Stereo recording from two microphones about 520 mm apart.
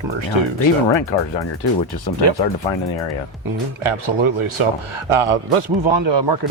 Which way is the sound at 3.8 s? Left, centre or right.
Right.